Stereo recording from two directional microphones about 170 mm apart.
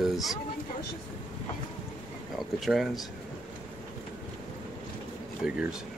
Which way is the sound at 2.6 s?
Centre (ahead or behind).